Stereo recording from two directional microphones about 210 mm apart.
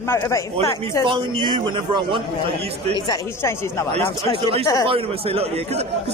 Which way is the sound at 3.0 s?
10° left (ahead or behind).